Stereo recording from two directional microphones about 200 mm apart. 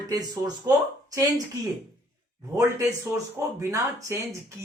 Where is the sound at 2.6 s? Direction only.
15° right (ahead or behind).